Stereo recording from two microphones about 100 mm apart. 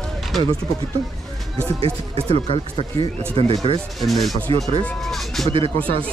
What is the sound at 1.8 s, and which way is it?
Speech, 75° right (ahead or behind).